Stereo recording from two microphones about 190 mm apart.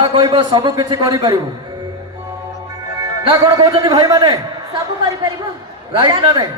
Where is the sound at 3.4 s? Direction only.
20° right (ahead or behind).